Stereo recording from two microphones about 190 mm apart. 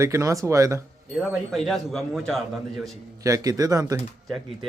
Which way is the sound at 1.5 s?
Centre (ahead or behind).